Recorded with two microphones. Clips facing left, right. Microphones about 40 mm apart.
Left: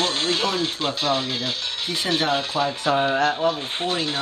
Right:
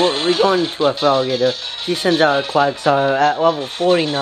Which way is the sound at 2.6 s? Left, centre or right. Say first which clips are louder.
Right 9 dB; right.